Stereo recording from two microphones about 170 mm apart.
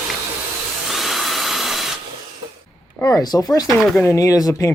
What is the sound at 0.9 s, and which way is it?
Drill, centre (ahead or behind).